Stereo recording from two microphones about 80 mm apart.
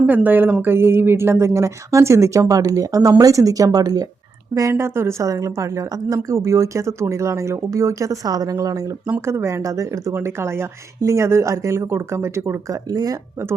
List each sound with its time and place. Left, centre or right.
0.0 s speech: right
4.7 s speech: right
9.2 s speech: right
12.7 s speech: right